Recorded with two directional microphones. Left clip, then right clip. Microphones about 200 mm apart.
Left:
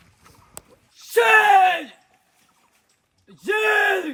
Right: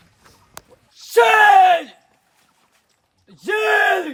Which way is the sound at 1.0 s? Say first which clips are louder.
Right 3 dB; 50° right (ahead or behind).